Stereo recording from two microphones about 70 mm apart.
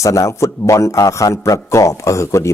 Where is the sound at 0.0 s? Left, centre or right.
Left.